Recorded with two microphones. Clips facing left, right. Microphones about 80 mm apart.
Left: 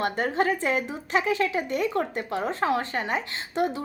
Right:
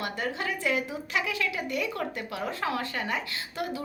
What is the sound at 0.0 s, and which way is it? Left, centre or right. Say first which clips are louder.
Speech: left 7 dB; left.